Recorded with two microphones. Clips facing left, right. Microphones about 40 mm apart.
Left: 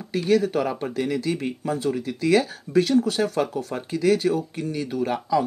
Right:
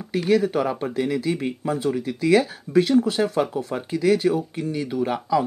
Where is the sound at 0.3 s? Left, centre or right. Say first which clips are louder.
Right 1 dB; centre.